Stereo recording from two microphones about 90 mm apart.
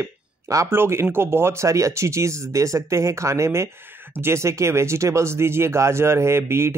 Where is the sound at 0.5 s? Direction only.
30° right (ahead or behind).